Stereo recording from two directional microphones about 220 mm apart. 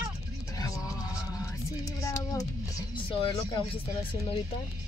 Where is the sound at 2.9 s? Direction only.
25° left (ahead or behind).